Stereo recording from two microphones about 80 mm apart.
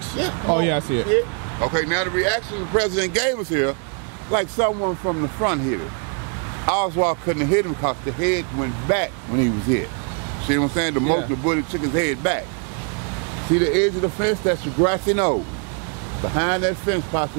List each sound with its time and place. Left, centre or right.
0.2 s speech: right
13.6 s speech: centre
16.3 s speech: right